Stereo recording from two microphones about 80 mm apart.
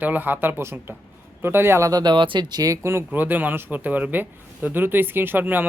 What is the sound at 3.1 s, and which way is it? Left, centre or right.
A man's voice, right.